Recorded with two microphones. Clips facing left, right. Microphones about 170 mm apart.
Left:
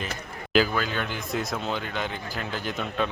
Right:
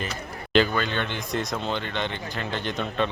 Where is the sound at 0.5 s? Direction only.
5° left (ahead or behind).